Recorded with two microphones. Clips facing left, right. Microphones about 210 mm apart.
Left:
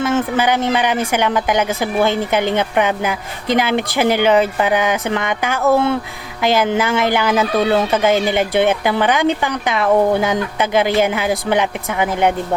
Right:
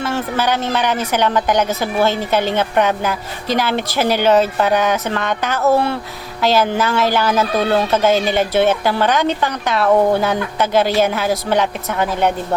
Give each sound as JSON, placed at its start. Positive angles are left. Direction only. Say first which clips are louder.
{"t": 0.0, "sound": "a woman's voice", "louder": "left 3 dB", "side_deg": 15}